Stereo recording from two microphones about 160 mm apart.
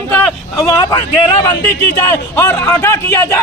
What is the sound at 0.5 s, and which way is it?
Speech, 20° left (ahead or behind).